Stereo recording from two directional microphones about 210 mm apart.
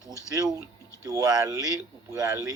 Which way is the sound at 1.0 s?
15° right (ahead or behind).